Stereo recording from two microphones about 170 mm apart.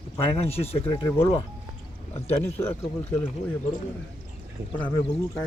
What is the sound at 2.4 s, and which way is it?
Speech, 10° left (ahead or behind).